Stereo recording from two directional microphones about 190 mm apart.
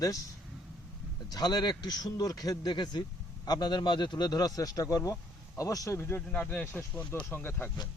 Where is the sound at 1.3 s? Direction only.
20° left (ahead or behind).